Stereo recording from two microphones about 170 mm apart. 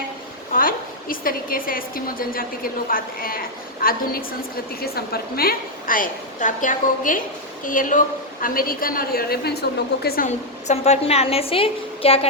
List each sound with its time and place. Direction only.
0.5 s a woman's voice: 55° left (ahead or behind)
10.2 s a woman's voice: 40° left (ahead or behind)